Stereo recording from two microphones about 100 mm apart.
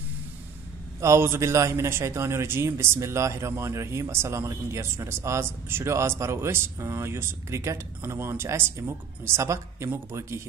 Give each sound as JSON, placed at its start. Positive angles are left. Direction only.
{"t": 1.0, "sound": "speech", "side_deg": -25}